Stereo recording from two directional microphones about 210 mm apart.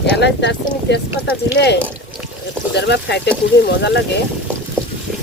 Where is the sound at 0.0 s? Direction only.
55° left (ahead or behind).